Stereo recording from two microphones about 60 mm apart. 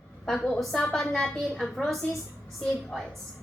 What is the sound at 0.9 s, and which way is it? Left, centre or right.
A woman's voice, centre.